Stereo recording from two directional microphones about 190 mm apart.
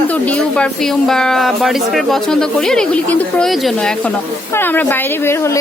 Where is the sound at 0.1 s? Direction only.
5° left (ahead or behind).